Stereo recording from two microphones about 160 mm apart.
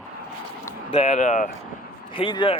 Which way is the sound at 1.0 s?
50° left (ahead or behind).